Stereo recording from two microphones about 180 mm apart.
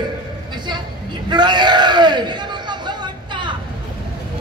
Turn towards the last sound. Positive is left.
turn(degrees=-25)  # may be behind; listen again after turning